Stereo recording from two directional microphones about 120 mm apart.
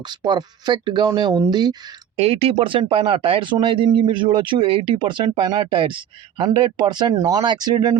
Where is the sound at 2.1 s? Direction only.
55° right (ahead or behind).